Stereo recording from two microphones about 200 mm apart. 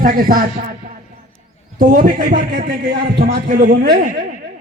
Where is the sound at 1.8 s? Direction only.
45° right (ahead or behind).